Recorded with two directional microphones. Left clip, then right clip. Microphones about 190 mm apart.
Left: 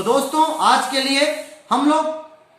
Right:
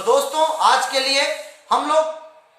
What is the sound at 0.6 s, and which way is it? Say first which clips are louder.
Speech: even; 15° right (ahead or behind).